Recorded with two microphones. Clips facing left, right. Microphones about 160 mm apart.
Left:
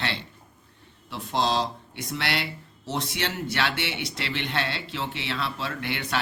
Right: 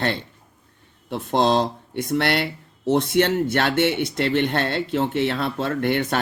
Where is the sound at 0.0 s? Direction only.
45° right (ahead or behind).